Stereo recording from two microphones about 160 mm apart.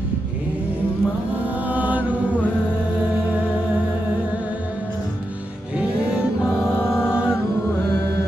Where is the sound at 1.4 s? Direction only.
10° right (ahead or behind).